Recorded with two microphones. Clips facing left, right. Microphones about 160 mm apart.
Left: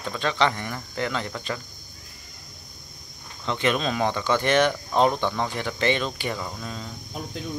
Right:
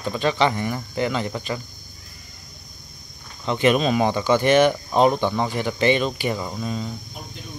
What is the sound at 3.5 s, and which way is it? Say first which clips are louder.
Speech: right 6 dB; 10° right (ahead or behind).